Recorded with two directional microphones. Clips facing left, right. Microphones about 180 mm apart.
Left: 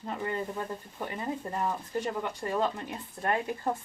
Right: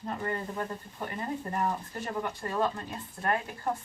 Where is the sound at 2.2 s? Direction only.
15° left (ahead or behind).